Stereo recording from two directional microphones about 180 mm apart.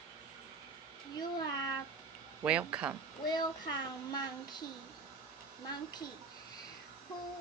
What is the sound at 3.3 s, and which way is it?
Child singing, 20° left (ahead or behind).